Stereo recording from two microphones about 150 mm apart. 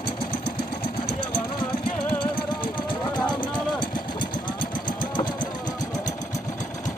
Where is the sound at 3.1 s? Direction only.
30° left (ahead or behind).